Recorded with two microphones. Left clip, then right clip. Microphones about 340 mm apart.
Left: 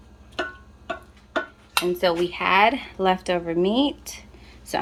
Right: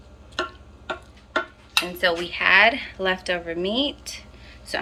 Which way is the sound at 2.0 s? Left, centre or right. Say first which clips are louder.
Even; left.